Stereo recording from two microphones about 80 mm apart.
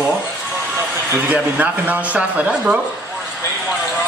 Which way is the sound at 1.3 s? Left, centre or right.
Centre.